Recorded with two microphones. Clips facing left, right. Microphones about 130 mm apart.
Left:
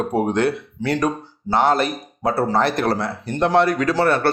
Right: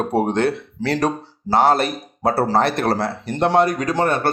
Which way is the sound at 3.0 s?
70° right (ahead or behind).